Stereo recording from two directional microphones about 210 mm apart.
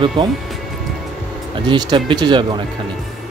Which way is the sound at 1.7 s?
20° right (ahead or behind).